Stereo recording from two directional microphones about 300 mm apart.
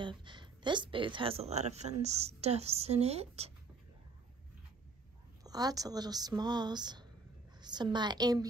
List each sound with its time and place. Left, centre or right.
0.0 s a woman's voice: centre
5.4 s speech: centre